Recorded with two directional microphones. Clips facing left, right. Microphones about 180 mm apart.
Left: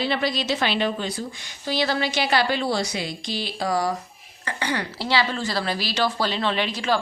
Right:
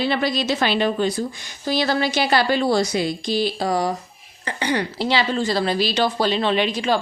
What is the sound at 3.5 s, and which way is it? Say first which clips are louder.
A woman's voice: right 2 dB; 25° right (ahead or behind).